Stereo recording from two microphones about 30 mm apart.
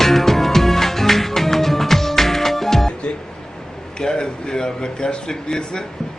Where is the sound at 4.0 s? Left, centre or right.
Left.